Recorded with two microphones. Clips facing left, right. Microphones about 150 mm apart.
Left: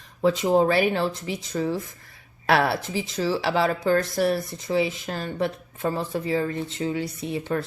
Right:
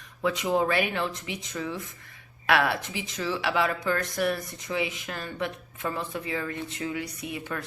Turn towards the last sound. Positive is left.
turn(degrees=30)  # may be behind; listen again after turning